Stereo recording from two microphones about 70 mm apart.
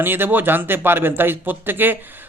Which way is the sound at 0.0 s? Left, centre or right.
Right.